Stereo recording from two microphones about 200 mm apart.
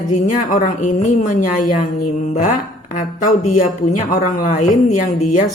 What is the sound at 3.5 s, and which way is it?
A woman's voice, 35° left (ahead or behind).